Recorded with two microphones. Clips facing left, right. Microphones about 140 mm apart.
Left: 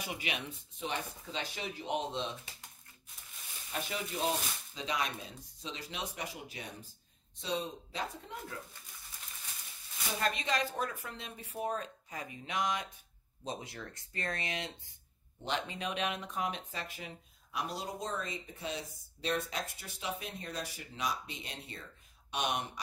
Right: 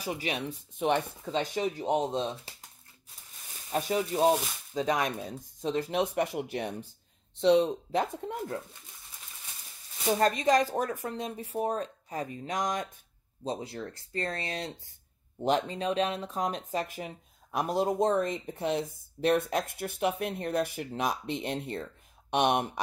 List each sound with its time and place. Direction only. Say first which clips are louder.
0.0 s speech: right 7 dB; 35° right (ahead or behind)
0.7 s speech: right 11 dB; 60° right (ahead or behind); by 2.5 s 40° right (ahead or behind)
3.7 s speech: right 10 dB; 40° right (ahead or behind)
10.1 s speech: right 9 dB; 40° right (ahead or behind)
13.4 s speech: right 7 dB; 30° right (ahead or behind); by 22.7 s 55° right (ahead or behind)